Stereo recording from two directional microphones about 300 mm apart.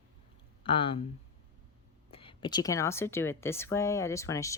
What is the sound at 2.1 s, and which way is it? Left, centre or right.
Speech, centre.